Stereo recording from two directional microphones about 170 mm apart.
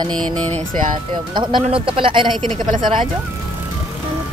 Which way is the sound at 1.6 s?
30° right (ahead or behind).